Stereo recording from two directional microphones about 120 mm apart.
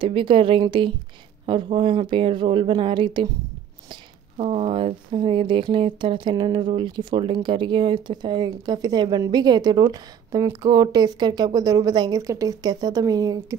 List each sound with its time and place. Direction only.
0.0 s speech: 45° right (ahead or behind); by 13.6 s 30° right (ahead or behind)